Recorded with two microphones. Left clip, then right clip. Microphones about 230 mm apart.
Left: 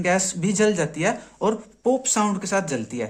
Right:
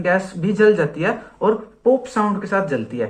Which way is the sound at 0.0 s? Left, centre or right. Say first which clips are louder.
Right 3 dB; left.